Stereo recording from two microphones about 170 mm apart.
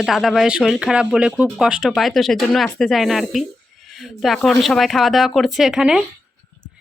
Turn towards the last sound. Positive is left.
turn(degrees=-5)  # may be behind; listen again after turning